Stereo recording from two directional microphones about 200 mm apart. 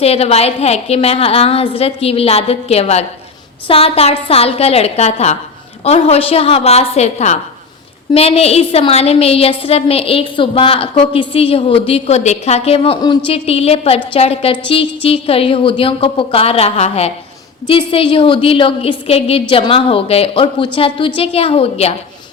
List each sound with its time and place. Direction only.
0.0 s a woman's voice: 30° left (ahead or behind)